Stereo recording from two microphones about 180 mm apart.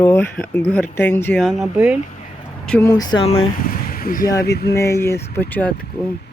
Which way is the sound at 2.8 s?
20° left (ahead or behind).